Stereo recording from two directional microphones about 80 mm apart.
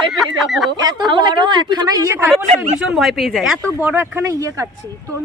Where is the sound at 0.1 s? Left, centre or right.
Centre.